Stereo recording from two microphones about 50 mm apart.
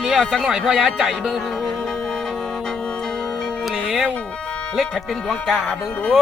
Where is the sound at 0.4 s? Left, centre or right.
Centre.